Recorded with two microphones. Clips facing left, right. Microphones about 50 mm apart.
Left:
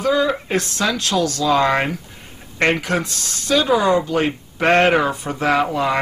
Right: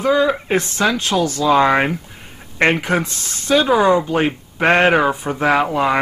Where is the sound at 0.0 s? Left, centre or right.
Right.